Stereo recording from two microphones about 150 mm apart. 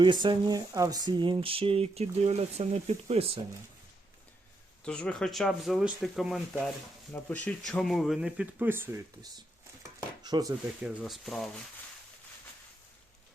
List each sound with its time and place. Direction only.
0.0 s speech: 30° right (ahead or behind)
4.8 s speech: 5° left (ahead or behind); by 9.0 s 15° right (ahead or behind)
9.8 s dishes: 25° right (ahead or behind)
10.8 s speech: 5° right (ahead or behind)